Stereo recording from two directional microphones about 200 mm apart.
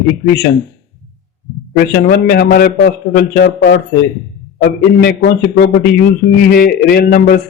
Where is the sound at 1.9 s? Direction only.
50° left (ahead or behind).